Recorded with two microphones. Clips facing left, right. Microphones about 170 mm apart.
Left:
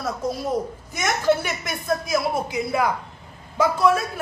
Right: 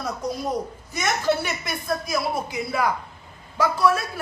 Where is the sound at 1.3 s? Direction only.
15° left (ahead or behind).